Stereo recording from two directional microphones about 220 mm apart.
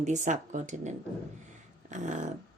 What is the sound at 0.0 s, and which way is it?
Speech, 35° right (ahead or behind).